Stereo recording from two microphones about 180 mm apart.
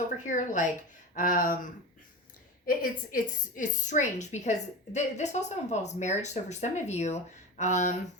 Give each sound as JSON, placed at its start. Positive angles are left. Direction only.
{"t": 0.3, "sound": "speech", "side_deg": 45}
{"t": 2.6, "sound": "a woman's voice", "side_deg": 50}